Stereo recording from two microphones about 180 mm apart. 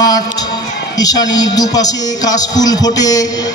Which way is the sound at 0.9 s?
20° left (ahead or behind).